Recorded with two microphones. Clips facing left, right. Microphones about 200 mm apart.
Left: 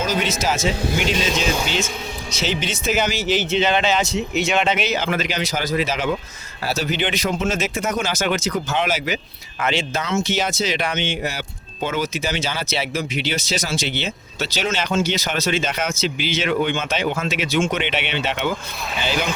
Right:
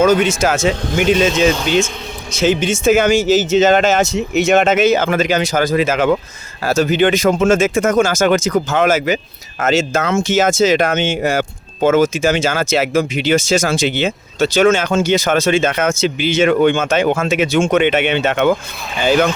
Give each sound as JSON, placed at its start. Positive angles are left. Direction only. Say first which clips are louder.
{"t": 0.0, "sound": "speech", "louder": "right 9 dB", "side_deg": -50}
{"t": 2.3, "sound": "speech", "louder": "right 10 dB", "side_deg": -50}